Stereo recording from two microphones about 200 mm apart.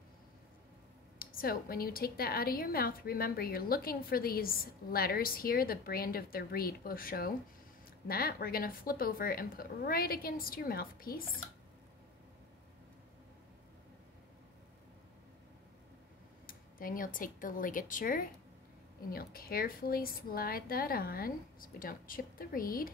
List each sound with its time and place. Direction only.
1.2 s a woman's voice: 45° left (ahead or behind)
16.4 s a woman's voice: 45° left (ahead or behind)